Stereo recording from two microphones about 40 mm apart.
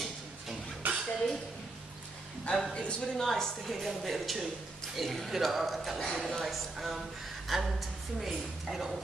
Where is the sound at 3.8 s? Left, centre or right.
Centre.